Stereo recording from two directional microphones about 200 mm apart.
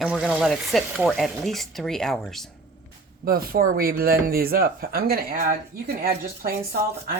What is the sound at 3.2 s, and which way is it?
Speech, 45° right (ahead or behind).